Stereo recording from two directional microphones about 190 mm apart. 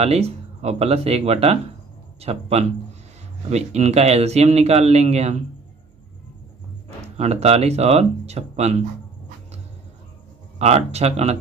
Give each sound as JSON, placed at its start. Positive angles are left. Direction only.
{"t": 0.0, "sound": "speech", "side_deg": -35}
{"t": 7.2, "sound": "speech", "side_deg": -35}
{"t": 10.6, "sound": "speech", "side_deg": -35}